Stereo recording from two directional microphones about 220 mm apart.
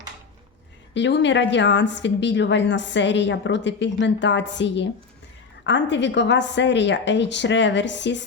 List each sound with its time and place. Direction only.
0.9 s a woman's voice: 55° left (ahead or behind)